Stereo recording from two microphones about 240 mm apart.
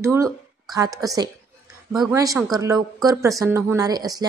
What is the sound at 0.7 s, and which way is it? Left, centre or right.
Speech, centre.